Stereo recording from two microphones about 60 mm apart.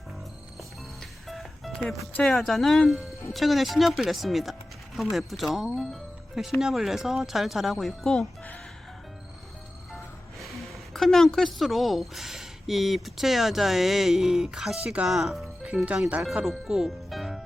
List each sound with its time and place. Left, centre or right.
0.9 s music: centre
2.2 s speech: centre
9.9 s a woman's voice: centre
15.7 s speech: right
16.2 s speech: centre